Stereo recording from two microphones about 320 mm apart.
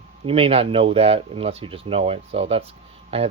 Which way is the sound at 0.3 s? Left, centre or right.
Centre.